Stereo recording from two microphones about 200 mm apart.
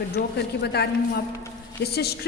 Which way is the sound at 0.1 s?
55° left (ahead or behind).